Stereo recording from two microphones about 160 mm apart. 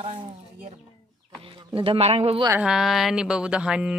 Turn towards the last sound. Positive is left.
turn(degrees=-5)  # may be behind; listen again after turning